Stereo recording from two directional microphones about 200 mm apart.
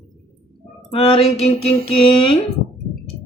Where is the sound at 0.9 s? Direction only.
25° left (ahead or behind).